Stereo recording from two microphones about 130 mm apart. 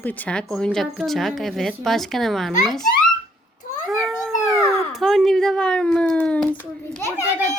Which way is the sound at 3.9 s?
Centre (ahead or behind).